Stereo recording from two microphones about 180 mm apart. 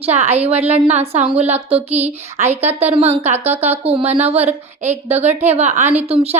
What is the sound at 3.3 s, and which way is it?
Speech, 10° right (ahead or behind).